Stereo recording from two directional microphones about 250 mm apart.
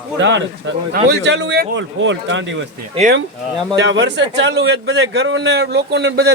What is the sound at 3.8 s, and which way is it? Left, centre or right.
A man's voice, right.